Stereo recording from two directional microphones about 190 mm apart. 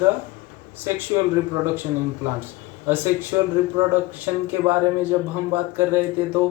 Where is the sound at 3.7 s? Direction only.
10° right (ahead or behind).